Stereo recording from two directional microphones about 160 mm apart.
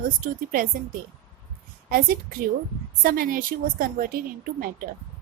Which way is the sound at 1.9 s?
65° right (ahead or behind).